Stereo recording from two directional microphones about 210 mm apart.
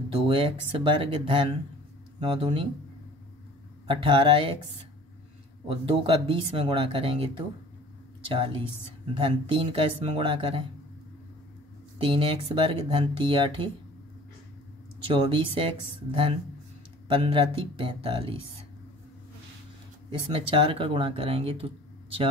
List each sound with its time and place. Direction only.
0.3 s speech: 25° right (ahead or behind)
3.8 s speech: 25° right (ahead or behind)
5.7 s speech: 25° right (ahead or behind)
12.0 s speech: 25° right (ahead or behind)
15.0 s speech: 25° right (ahead or behind)
20.1 s speech: 25° right (ahead or behind)